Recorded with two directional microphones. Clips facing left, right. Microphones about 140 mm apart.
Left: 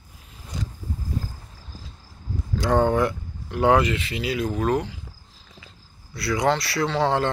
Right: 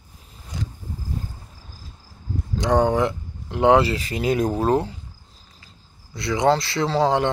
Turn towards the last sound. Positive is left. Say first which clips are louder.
# right 2 dB
turn(degrees=-25)  # may be behind; listen again after turning